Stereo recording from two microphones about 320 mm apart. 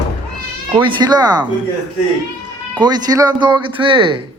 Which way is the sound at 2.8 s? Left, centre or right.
Centre.